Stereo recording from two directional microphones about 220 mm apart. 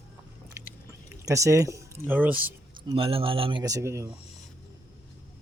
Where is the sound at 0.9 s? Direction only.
15° right (ahead or behind).